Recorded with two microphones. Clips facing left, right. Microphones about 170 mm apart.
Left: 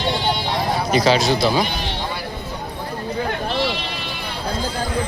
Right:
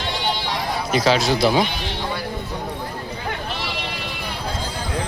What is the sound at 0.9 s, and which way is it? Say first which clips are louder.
Speech: left 1 dB; centre (ahead or behind).